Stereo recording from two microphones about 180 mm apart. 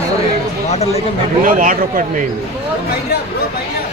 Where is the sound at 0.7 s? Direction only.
35° left (ahead or behind).